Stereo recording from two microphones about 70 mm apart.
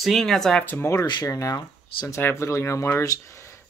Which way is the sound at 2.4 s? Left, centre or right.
Left.